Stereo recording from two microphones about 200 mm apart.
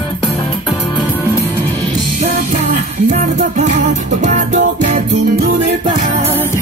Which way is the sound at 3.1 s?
35° right (ahead or behind).